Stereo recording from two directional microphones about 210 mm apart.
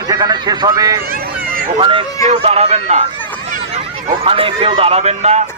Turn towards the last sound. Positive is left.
turn(degrees=-30)  # may be behind; listen again after turning